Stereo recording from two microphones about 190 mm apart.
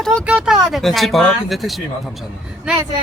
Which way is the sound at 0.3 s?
5° right (ahead or behind).